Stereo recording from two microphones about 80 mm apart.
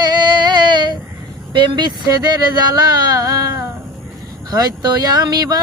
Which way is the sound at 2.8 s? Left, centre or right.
Right.